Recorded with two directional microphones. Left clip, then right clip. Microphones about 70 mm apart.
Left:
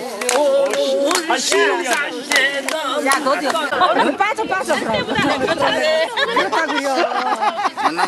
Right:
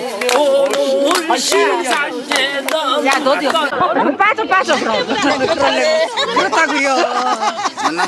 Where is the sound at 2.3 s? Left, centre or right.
Right.